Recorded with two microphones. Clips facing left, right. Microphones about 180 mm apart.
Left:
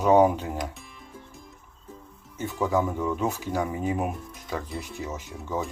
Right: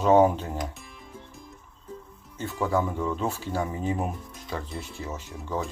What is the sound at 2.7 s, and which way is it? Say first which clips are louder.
Speech: left 1 dB; 5° left (ahead or behind).